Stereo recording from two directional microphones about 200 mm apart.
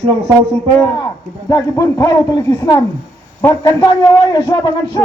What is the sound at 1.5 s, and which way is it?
A man's voice, 15° left (ahead or behind).